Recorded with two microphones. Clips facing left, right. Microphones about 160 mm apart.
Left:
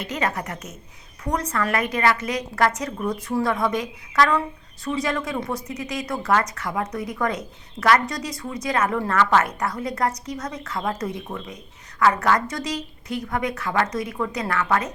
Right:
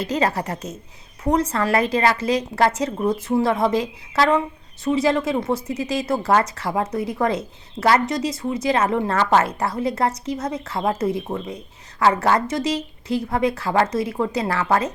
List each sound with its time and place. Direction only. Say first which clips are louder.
0.0 s a woman's voice: right 5 dB; 35° right (ahead or behind)